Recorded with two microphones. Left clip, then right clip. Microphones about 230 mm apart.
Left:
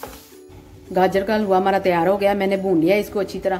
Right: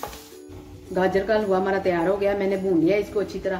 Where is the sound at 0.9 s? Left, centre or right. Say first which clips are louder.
Left 3 dB; left.